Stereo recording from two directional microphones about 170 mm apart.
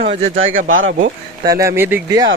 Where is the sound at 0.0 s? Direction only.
35° right (ahead or behind).